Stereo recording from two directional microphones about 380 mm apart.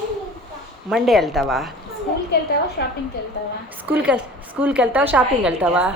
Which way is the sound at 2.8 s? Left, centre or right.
Left.